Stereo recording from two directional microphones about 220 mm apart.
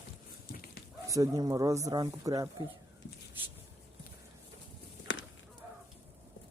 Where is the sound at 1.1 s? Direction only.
15° right (ahead or behind).